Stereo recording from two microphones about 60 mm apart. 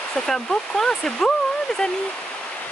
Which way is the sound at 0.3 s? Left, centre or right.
Centre.